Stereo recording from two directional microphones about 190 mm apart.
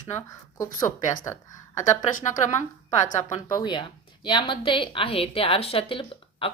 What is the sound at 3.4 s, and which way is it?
Speech, 20° left (ahead or behind).